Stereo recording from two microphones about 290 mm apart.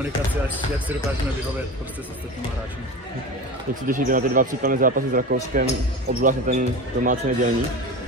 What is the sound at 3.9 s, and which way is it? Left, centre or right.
Speech, right.